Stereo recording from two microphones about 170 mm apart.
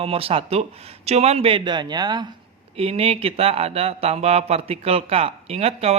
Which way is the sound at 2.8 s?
35° right (ahead or behind).